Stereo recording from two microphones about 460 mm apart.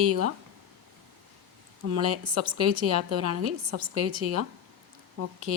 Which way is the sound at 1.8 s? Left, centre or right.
Right.